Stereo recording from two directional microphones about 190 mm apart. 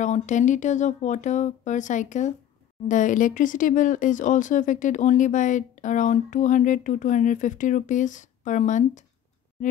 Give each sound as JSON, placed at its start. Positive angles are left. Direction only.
{"t": 0.0, "sound": "speech", "side_deg": 40}